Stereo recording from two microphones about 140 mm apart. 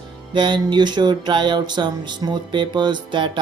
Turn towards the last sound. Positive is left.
turn(degrees=-35)  # may be behind; listen again after turning